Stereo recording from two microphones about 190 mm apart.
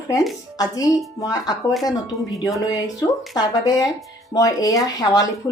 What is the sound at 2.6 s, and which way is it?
Speech, 20° left (ahead or behind).